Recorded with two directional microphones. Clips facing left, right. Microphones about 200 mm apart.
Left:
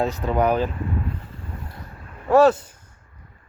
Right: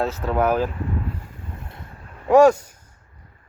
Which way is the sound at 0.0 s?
Centre (ahead or behind).